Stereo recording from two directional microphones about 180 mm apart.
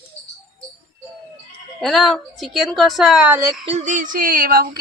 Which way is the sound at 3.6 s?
40° right (ahead or behind).